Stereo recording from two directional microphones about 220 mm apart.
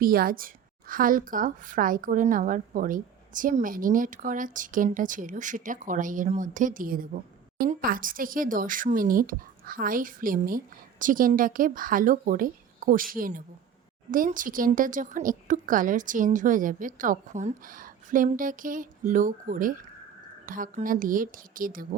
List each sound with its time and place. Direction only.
0.0 s a woman's voice: 40° right (ahead or behind)